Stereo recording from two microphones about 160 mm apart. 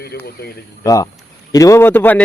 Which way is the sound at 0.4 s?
80° left.